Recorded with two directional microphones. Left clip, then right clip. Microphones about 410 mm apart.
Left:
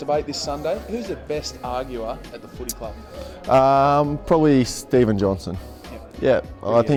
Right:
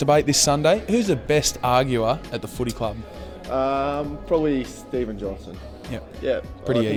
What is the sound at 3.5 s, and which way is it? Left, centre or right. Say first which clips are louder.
Speech: left 8 dB; left.